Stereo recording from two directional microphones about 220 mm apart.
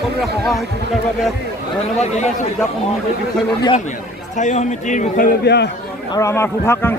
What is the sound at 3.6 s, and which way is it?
A man's voice, 30° left (ahead or behind).